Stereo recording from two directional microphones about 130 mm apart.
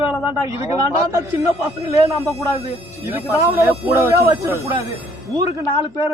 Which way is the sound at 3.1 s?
20° right (ahead or behind).